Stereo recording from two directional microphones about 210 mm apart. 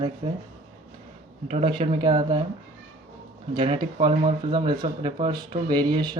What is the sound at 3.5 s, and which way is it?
Speech, 25° right (ahead or behind).